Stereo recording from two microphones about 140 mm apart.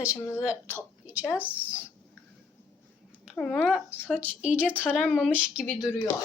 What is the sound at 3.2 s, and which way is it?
Speech, 5° left (ahead or behind).